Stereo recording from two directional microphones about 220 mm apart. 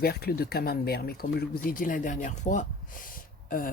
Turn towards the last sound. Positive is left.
turn(degrees=40)  # may be behind; listen again after turning